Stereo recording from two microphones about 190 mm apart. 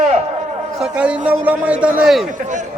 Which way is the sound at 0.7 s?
5° right (ahead or behind).